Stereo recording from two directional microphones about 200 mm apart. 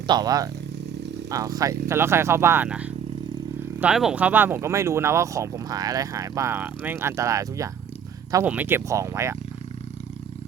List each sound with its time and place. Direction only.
0.1 s speech: 20° right (ahead or behind)